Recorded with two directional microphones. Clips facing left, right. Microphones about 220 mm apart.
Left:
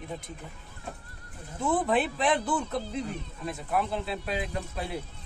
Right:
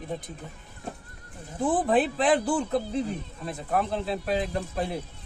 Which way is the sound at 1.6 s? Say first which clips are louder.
Right 3 dB; 35° right (ahead or behind).